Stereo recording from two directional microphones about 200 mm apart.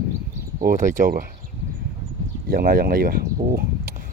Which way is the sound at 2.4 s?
45° right (ahead or behind).